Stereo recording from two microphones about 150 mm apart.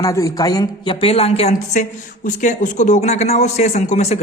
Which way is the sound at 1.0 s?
40° left (ahead or behind).